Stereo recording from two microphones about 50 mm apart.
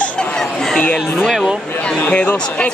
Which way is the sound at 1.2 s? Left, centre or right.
Centre.